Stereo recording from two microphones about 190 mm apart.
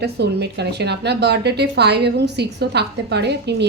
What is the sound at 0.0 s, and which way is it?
A woman's voice, 60° right (ahead or behind).